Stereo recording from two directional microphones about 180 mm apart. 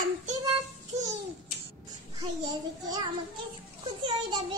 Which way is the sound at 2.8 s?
20° right (ahead or behind).